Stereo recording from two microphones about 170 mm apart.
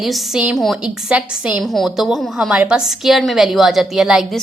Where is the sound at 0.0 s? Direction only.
Centre (ahead or behind).